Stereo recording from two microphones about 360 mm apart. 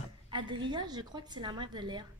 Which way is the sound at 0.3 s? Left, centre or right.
Centre.